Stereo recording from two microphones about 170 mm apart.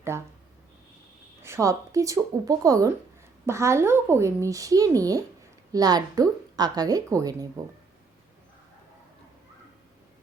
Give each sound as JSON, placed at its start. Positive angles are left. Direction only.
{"t": 0.1, "sound": "a woman's voice", "side_deg": -15}
{"t": 1.4, "sound": "a woman's voice", "side_deg": -15}